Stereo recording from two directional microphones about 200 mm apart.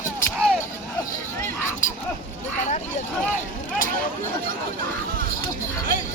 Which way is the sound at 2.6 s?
35° left (ahead or behind).